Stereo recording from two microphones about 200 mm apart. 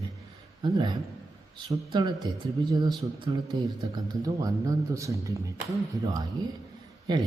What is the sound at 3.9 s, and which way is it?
A man's voice, 20° right (ahead or behind).